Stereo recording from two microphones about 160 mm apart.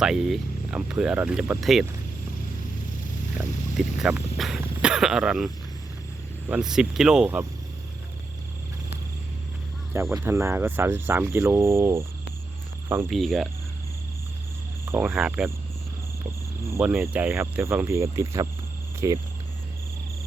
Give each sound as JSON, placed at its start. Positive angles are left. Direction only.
{"t": 0.0, "sound": "speech", "side_deg": -5}
{"t": 3.3, "sound": "speech", "side_deg": -5}
{"t": 6.5, "sound": "speech", "side_deg": -5}
{"t": 9.9, "sound": "speech", "side_deg": -15}
{"t": 13.1, "sound": "speech", "side_deg": 0}
{"t": 15.0, "sound": "speech", "side_deg": -5}
{"t": 16.6, "sound": "speech", "side_deg": -15}